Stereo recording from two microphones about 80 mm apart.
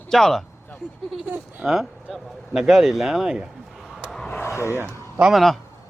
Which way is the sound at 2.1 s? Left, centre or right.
Centre.